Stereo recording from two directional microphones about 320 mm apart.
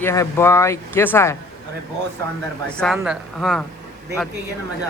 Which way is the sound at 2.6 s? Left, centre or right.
Centre.